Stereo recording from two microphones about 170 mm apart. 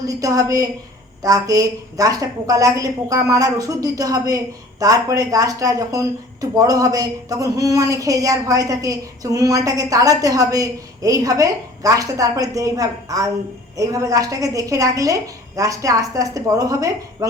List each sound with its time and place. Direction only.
0.1 s speech: 20° right (ahead or behind)